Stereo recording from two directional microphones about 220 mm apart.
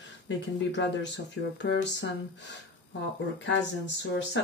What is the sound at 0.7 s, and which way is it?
Speech, 55° left (ahead or behind).